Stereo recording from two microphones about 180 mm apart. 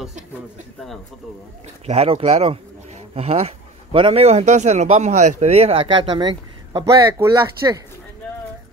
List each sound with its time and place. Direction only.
1.9 s a man's voice: 35° right (ahead or behind)